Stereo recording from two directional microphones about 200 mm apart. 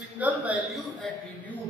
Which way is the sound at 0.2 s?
5° right (ahead or behind).